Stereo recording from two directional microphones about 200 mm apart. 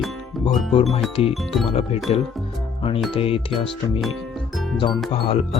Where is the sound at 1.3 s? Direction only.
Centre (ahead or behind).